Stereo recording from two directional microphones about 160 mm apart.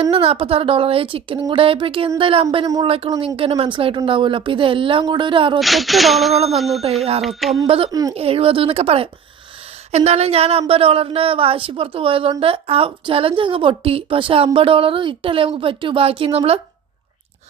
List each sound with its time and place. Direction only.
0.0 s speech: 35° right (ahead or behind)
5.5 s a sound: centre (ahead or behind)
8.1 s speech: 35° right (ahead or behind)